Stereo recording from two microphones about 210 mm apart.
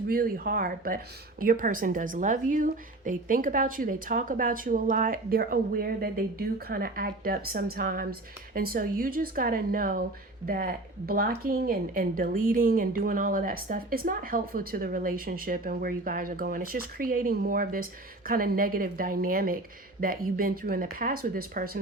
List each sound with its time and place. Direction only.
0.1 s speech: 45° right (ahead or behind)